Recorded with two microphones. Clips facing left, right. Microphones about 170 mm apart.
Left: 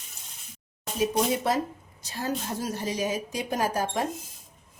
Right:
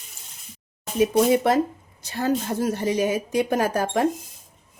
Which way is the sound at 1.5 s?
65° right (ahead or behind).